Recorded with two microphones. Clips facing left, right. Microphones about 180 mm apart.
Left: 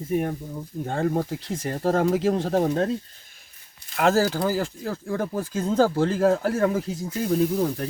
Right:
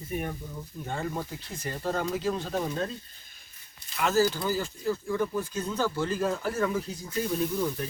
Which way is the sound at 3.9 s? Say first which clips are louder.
Left 4 dB; 90° left.